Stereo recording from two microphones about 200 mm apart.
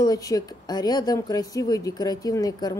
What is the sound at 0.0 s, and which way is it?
A woman's voice, 20° left (ahead or behind).